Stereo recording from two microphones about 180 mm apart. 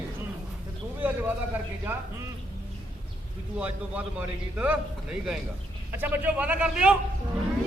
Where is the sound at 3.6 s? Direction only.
10° right (ahead or behind).